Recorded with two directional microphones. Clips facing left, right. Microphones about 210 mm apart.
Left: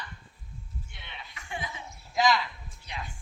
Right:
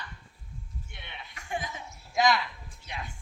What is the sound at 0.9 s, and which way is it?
Chuckle, 50° right (ahead or behind).